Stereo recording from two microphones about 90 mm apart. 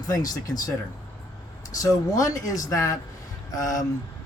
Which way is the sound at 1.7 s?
40° left (ahead or behind).